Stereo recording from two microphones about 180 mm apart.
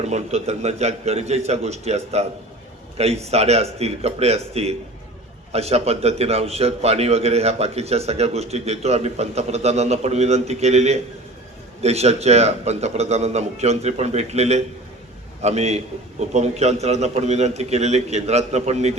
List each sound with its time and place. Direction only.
0.0 s a man's voice: 35° right (ahead or behind)